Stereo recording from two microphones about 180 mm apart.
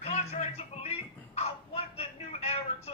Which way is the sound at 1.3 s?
35° left (ahead or behind).